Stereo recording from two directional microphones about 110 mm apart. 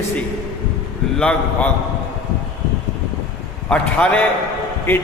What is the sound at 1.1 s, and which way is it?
Speech, 5° left (ahead or behind).